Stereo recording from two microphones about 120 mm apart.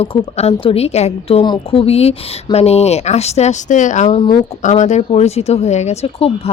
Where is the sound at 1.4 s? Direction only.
45° left (ahead or behind); by 5.9 s 70° left (ahead or behind).